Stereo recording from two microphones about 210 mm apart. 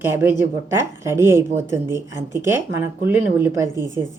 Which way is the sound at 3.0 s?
10° right (ahead or behind).